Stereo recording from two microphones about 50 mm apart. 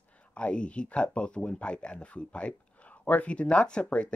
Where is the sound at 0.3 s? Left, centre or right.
Left.